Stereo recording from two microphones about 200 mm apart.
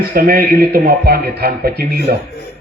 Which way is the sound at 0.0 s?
50° right (ahead or behind).